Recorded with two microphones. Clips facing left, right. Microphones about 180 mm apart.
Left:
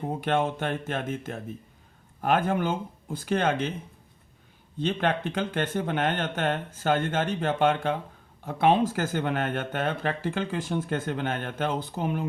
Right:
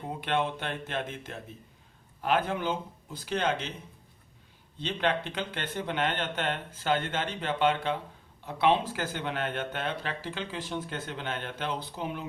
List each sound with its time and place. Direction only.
0.2 s speech: 45° left (ahead or behind)
4.8 s speech: 50° left (ahead or behind)